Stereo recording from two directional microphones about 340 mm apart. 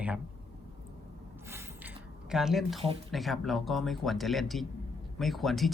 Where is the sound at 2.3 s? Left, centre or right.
Centre.